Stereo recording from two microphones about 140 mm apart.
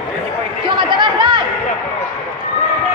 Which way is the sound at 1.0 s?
35° right (ahead or behind).